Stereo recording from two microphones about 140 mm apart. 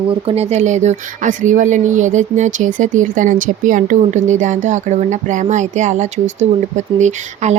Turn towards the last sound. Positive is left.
turn(degrees=-55)  # may be behind; listen again after turning